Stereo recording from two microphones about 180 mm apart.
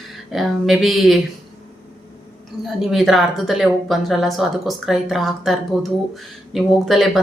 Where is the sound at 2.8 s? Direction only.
Centre (ahead or behind).